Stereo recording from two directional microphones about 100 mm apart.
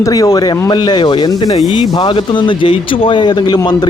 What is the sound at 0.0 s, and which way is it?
Speech, 40° left (ahead or behind).